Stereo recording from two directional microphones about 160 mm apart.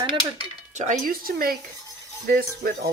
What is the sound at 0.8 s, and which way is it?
Speech, 55° right (ahead or behind).